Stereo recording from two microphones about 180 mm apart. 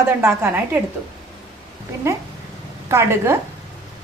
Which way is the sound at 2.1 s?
15° right (ahead or behind).